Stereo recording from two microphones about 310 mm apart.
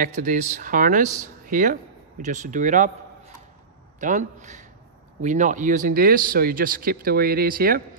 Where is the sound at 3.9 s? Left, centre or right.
Right.